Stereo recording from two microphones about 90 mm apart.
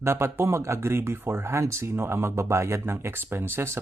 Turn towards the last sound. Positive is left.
turn(degrees=-25)  # may be behind; listen again after turning